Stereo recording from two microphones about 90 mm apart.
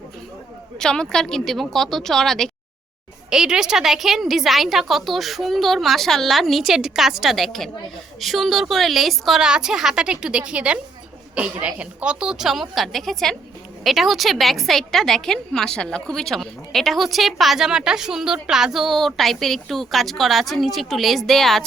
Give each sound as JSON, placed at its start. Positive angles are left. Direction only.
{"t": 0.8, "sound": "a woman's voice", "side_deg": 5}
{"t": 3.2, "sound": "a woman's voice", "side_deg": -5}